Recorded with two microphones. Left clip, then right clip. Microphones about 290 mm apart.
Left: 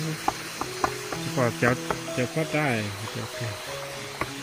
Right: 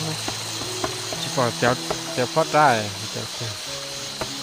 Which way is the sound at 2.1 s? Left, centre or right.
Right.